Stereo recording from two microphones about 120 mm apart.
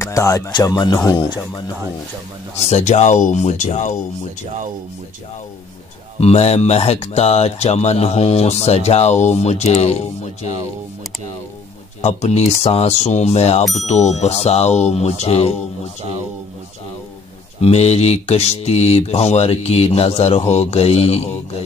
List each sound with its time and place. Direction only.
0.0 s speech: 25° left (ahead or behind)
2.6 s speech: 75° left (ahead or behind)
6.1 s speech: 60° left (ahead or behind)
12.0 s speech: 65° left (ahead or behind)
13.7 s speech: 70° left (ahead or behind)
17.6 s speech: 60° left (ahead or behind)